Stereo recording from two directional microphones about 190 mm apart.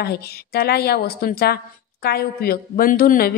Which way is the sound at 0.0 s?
55° left (ahead or behind).